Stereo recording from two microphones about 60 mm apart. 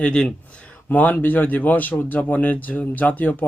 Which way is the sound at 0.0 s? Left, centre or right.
Centre.